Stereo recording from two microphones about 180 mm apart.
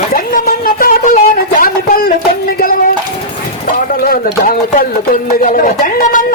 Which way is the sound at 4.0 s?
55° left (ahead or behind).